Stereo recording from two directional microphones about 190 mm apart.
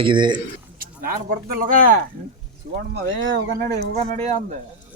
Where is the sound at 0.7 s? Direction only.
50° right (ahead or behind).